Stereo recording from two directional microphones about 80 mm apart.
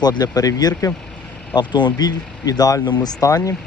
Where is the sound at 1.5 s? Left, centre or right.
Left.